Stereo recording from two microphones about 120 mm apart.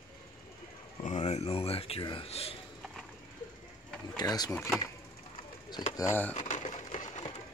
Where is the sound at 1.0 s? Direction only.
70° left (ahead or behind).